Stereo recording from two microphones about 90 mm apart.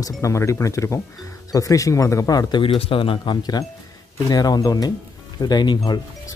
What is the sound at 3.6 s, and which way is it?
Speech, 60° left (ahead or behind).